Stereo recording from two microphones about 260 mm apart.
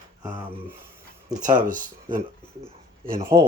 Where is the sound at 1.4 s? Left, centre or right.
Right.